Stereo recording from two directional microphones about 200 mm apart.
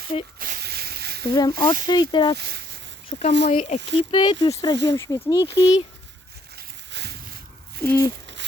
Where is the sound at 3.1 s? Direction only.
30° left (ahead or behind).